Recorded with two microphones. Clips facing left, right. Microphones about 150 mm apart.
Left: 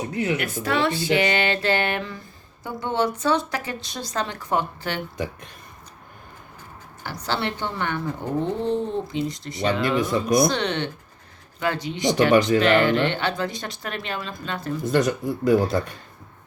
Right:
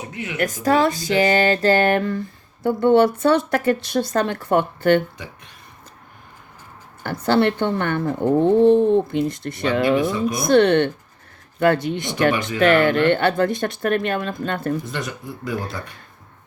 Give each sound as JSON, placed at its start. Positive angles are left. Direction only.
{"t": 0.1, "sound": "speech", "side_deg": 35}
{"t": 0.3, "sound": "speech", "side_deg": -45}
{"t": 5.1, "sound": "speech", "side_deg": 45}
{"t": 7.0, "sound": "speech", "side_deg": -55}
{"t": 14.8, "sound": "speech", "side_deg": 40}